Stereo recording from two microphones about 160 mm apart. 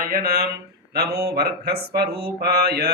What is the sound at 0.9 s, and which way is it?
Mantra, 85° right.